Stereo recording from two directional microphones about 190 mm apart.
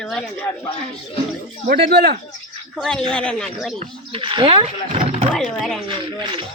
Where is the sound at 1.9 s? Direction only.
55° right (ahead or behind).